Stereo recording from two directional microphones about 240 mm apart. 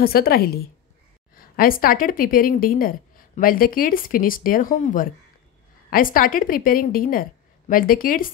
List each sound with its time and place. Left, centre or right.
0.0 s a woman's voice: left